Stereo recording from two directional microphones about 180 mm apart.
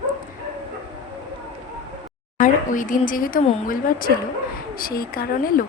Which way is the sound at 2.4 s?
45° left (ahead or behind).